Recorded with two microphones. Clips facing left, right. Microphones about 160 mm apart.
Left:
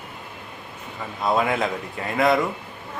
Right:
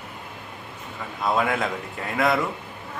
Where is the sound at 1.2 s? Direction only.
Centre (ahead or behind).